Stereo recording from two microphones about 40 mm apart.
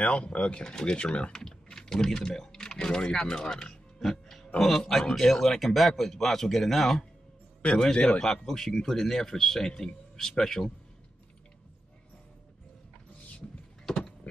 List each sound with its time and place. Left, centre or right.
0.0 s speech: left
1.3 s speech: centre
4.0 s music: centre
4.6 s speech: centre
7.6 s speech: left
8.2 s speech: centre
13.8 s a sound: centre